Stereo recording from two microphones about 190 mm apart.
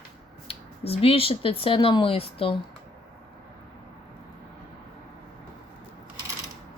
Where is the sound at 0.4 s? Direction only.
30° left (ahead or behind).